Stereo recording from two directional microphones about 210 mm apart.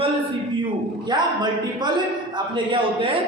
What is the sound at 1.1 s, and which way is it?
A man's voice, 20° right (ahead or behind).